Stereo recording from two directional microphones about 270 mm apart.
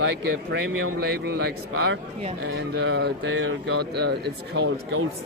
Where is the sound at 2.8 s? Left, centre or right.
Right.